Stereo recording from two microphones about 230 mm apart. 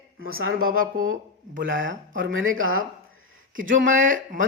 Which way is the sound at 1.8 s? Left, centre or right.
Right.